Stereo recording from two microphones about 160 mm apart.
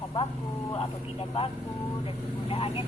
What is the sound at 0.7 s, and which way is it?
Speech, 35° left (ahead or behind).